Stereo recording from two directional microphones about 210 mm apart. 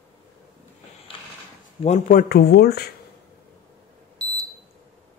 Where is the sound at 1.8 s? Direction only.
35° left (ahead or behind).